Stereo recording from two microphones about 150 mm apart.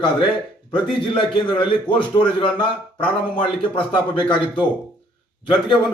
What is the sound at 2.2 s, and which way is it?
A man's voice, 35° left (ahead or behind).